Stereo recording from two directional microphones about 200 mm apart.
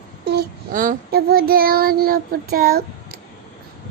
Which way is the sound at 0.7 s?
45° right (ahead or behind).